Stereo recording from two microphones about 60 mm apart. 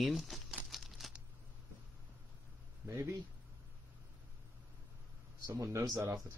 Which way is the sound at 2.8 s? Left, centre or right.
Right.